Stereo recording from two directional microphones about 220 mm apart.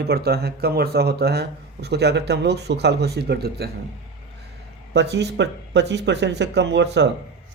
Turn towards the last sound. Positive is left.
turn(degrees=-50)  # may be behind; listen again after turning